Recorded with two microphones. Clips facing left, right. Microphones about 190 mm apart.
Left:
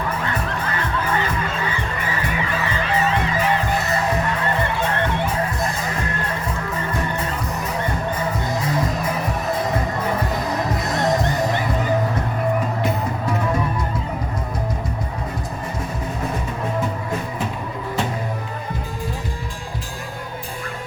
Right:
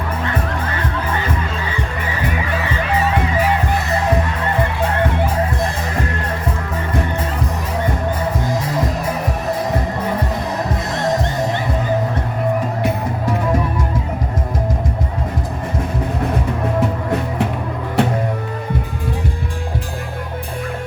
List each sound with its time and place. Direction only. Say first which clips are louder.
17.1 s music: right 6 dB; 70° right (ahead or behind)